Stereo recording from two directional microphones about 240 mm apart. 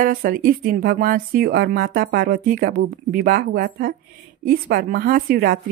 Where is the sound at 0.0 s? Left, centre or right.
Right.